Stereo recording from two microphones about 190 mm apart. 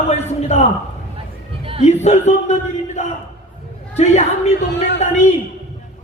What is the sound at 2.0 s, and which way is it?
Speech, 35° left (ahead or behind).